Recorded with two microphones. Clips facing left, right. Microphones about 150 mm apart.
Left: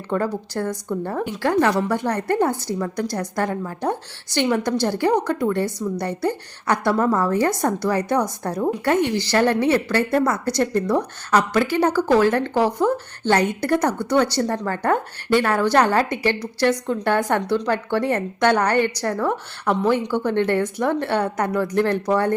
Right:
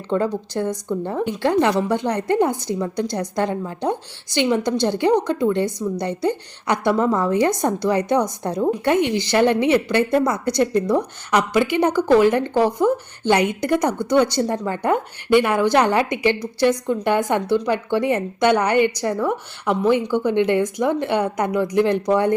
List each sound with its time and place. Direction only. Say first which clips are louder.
0.1 s a woman's voice: right 2 dB; 20° right (ahead or behind)